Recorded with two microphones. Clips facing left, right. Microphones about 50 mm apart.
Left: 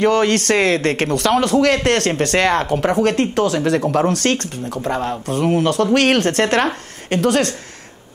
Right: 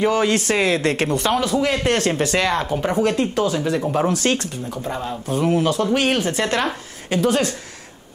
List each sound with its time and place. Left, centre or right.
0.0 s speech: left
1.1 s speech: left
4.1 s speech: left
5.9 s speech: left